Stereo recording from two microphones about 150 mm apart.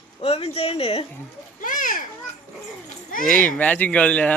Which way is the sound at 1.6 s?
65° left (ahead or behind).